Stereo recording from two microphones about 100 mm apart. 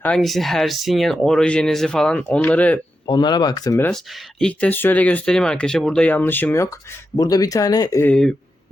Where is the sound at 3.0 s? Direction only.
50° left (ahead or behind).